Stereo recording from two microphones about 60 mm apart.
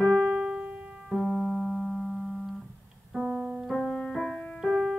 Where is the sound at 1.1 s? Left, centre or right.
Centre.